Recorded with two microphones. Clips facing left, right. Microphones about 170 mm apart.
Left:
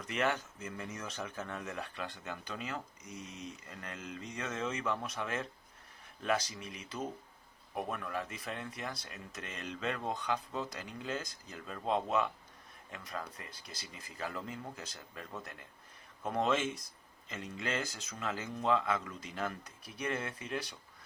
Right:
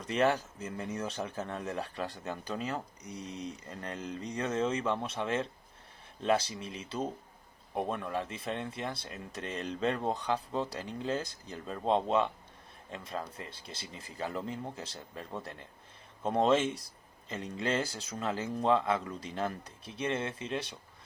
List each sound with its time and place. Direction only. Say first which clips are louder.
0.0 s speech: right 5 dB; 35° right (ahead or behind)